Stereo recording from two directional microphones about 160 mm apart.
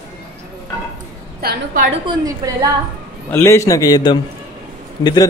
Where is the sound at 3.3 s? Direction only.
15° left (ahead or behind).